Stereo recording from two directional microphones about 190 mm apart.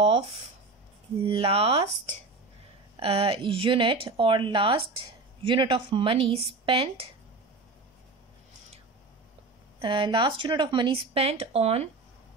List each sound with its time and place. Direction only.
1.2 s speech: 30° right (ahead or behind)
3.0 s speech: 30° right (ahead or behind)
9.8 s speech: 25° right (ahead or behind)